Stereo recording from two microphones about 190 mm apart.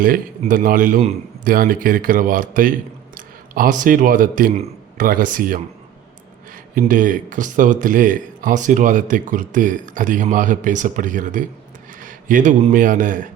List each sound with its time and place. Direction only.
0.0 s speech: 45° right (ahead or behind)
6.7 s speech: 45° right (ahead or behind)